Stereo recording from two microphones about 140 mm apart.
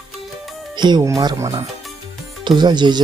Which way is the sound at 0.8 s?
30° right (ahead or behind).